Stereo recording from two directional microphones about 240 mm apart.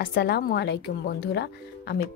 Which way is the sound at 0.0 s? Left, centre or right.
Left.